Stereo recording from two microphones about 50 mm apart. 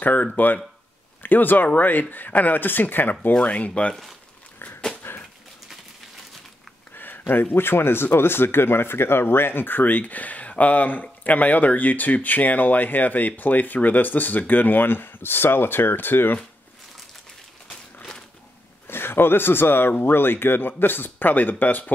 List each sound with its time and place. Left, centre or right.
0.0 s speech: left
3.4 s speech: left
5.0 s dog: left
7.0 s speech: left
18.9 s speech: left